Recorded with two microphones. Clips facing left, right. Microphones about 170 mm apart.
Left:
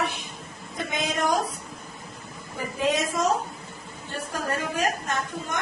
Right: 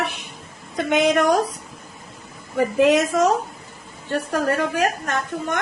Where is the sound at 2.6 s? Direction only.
75° right (ahead or behind).